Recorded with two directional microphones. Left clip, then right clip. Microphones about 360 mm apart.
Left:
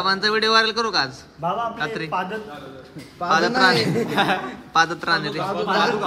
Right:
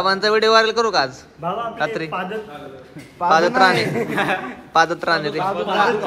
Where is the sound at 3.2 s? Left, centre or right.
Centre.